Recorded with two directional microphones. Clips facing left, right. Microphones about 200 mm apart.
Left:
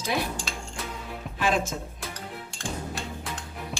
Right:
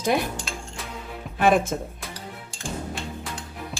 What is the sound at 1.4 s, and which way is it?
Speech, 55° right (ahead or behind).